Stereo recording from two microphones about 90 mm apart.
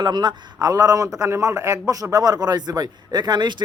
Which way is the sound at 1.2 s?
30° right (ahead or behind).